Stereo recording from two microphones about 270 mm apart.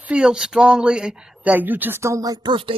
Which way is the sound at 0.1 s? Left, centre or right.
Centre.